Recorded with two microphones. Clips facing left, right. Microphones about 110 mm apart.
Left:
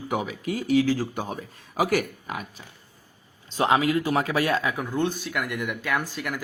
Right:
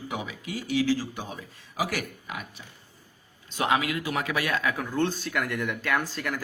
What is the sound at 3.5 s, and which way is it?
A man's voice, 30° left (ahead or behind).